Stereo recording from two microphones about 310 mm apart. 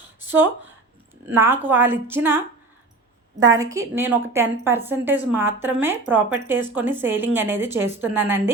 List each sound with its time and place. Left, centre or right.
0.3 s speech: centre
3.6 s speech: centre